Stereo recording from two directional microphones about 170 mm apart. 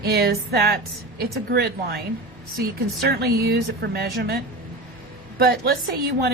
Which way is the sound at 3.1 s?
70° right (ahead or behind).